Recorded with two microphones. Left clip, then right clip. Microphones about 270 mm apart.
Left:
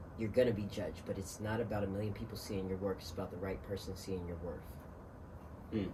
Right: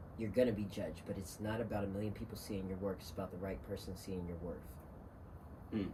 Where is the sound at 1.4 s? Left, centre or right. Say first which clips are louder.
Left 2 dB; centre.